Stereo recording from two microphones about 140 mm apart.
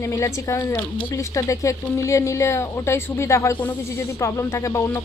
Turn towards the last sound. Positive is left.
turn(degrees=20)  # may be behind; listen again after turning